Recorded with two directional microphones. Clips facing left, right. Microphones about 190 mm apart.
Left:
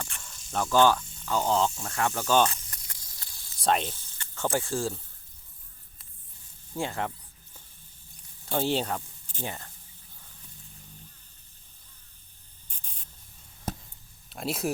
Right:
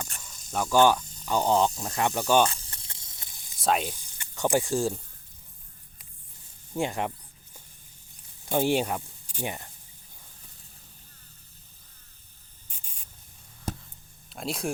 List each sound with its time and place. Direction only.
0.5 s speech: 10° right (ahead or behind)
2.5 s a sound: 30° right (ahead or behind)
3.6 s speech: 5° right (ahead or behind)
6.7 s speech: 15° right (ahead or behind)
8.4 s speech: 15° right (ahead or behind)
12.6 s spray: 5° right (ahead or behind)
14.3 s speech: centre (ahead or behind)